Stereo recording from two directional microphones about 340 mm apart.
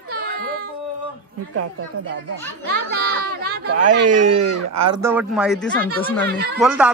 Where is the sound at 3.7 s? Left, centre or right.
Right.